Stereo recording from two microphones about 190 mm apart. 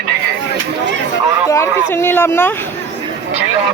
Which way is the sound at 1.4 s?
15° left (ahead or behind).